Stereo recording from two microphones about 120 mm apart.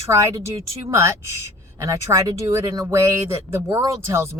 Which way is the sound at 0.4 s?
25° right (ahead or behind).